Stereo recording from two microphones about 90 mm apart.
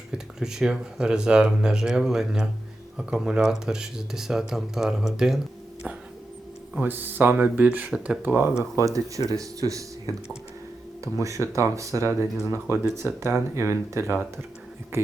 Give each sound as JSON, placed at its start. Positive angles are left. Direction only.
{"t": 0.1, "sound": "speech", "side_deg": -5}
{"t": 6.8, "sound": "speech", "side_deg": -20}
{"t": 8.2, "sound": "speech", "side_deg": -20}
{"t": 8.8, "sound": "speech", "side_deg": -40}